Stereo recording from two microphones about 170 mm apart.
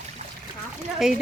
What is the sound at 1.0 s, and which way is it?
Speech, 5° right (ahead or behind).